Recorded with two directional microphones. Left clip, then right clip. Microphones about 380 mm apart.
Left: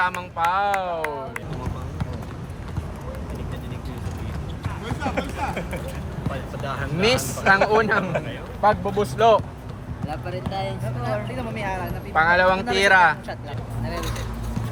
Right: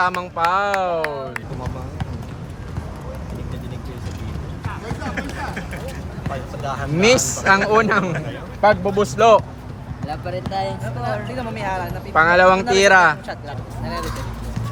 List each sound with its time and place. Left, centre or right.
0.0 s speech: centre
5.1 s a sound: centre
6.7 s speech: centre